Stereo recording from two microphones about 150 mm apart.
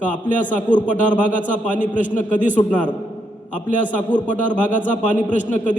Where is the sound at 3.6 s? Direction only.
60° left (ahead or behind).